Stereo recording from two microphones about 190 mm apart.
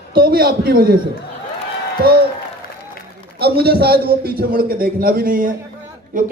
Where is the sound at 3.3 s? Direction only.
55° right (ahead or behind).